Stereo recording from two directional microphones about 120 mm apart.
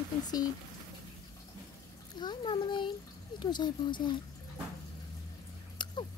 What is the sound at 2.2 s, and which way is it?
A child's voice, 40° left (ahead or behind).